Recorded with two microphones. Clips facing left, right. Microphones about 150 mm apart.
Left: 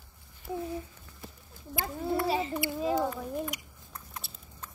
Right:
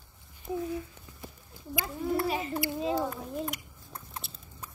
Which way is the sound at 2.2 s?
30° left (ahead or behind).